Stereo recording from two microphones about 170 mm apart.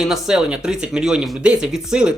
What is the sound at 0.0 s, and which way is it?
Speech, 5° right (ahead or behind).